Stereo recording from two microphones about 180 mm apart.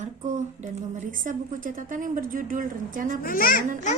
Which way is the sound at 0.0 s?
40° right (ahead or behind).